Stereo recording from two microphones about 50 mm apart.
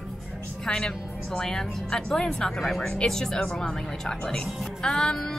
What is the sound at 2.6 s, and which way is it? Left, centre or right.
A woman's voice, centre.